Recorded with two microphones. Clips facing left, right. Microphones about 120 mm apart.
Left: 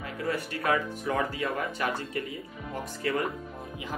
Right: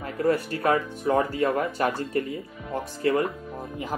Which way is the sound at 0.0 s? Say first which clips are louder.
Right 8 dB; 40° right (ahead or behind).